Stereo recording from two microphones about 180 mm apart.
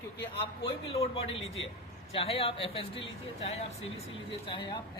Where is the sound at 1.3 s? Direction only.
90° left.